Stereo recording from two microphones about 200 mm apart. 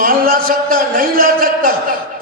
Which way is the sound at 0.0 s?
45° right (ahead or behind).